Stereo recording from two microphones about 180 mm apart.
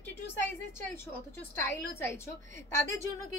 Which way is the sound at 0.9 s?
10° left (ahead or behind).